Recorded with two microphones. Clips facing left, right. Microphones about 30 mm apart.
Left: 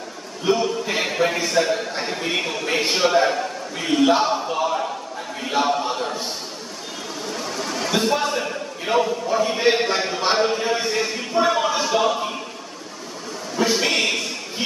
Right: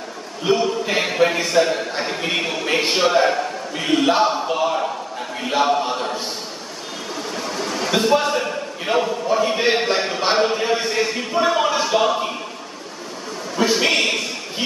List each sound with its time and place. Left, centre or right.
0.5 s a man's voice: centre
7.2 s a man's voice: centre
11.6 s a sound: centre
13.7 s a man's voice: right